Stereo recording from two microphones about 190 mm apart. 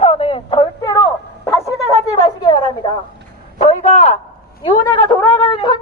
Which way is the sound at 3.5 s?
35° left (ahead or behind).